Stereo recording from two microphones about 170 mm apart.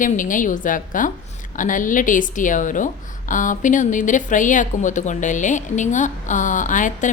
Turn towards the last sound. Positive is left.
turn(degrees=45)  # may be behind; listen again after turning